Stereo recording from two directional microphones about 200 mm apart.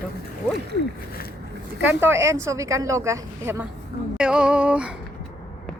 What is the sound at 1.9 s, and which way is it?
A woman's voice, 10° right (ahead or behind).